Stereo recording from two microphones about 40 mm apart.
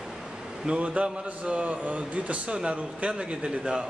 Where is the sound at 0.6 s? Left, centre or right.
Right.